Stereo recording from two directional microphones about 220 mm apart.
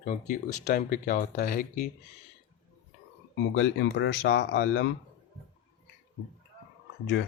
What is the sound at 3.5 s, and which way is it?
Speech, 55° left (ahead or behind).